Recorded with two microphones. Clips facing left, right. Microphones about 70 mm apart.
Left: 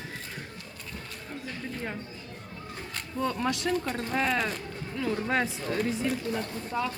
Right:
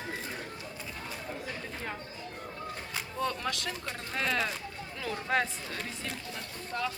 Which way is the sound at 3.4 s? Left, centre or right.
Centre.